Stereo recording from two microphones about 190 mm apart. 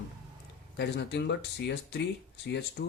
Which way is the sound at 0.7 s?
65° left (ahead or behind).